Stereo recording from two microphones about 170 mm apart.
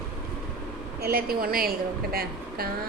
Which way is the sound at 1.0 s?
65° right (ahead or behind).